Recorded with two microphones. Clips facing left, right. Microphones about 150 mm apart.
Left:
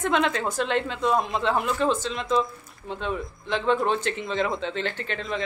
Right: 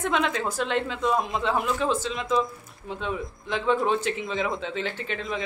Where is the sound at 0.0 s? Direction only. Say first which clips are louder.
Left 2 dB; centre (ahead or behind).